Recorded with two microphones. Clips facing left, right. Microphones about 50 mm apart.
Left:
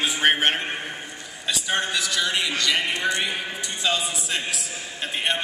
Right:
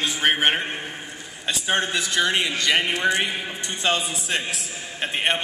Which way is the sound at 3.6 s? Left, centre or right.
Right.